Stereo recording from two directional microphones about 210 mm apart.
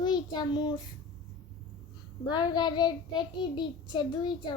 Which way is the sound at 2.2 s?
20° left (ahead or behind).